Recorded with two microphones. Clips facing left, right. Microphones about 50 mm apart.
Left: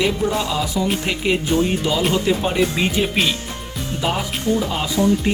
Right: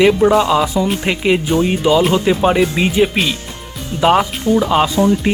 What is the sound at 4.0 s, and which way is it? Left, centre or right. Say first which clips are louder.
Speech: right 10 dB; right.